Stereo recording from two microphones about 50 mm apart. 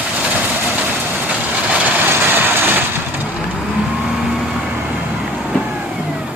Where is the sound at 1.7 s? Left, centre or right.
Right.